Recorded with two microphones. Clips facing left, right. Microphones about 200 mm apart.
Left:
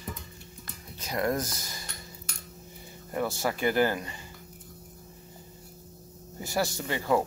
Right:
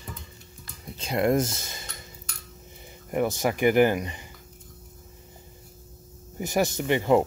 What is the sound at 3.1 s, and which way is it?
Speech, 20° right (ahead or behind).